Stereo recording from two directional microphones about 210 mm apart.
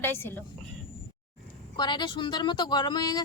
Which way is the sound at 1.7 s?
20° left (ahead or behind).